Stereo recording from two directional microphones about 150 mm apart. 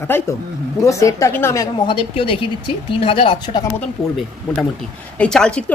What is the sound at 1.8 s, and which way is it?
Speech, 35° left (ahead or behind).